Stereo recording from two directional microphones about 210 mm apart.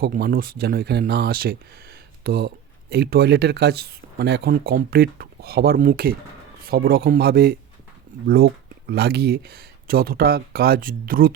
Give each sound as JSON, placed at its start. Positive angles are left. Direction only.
{"t": 0.0, "sound": "speech", "side_deg": -45}
{"t": 8.1, "sound": "a sound", "side_deg": -40}
{"t": 8.9, "sound": "speech", "side_deg": -50}